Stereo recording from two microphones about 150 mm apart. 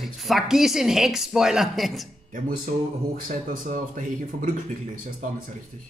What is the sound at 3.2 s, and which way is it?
Speech, 60° right (ahead or behind).